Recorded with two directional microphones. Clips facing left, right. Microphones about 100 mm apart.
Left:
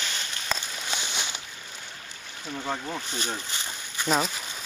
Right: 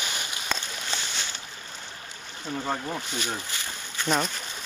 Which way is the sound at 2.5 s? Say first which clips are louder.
Right 2 dB; 10° right (ahead or behind).